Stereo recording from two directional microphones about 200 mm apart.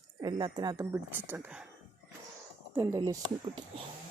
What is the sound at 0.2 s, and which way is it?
A woman's voice, 20° right (ahead or behind).